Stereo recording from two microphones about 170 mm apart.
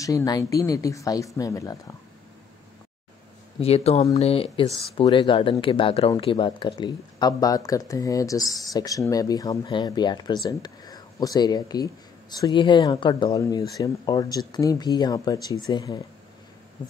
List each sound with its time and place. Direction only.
0.0 s speech: 20° left (ahead or behind)
3.5 s speech: 35° left (ahead or behind)